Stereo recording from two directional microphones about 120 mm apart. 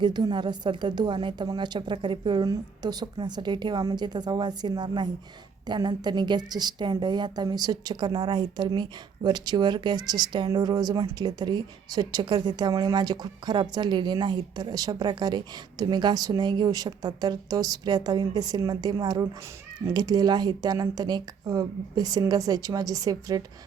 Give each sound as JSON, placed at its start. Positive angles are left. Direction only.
{"t": 0.0, "sound": "a woman's voice", "side_deg": -40}